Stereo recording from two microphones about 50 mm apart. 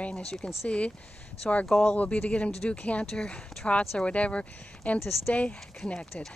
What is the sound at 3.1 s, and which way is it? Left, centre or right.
Speech, centre.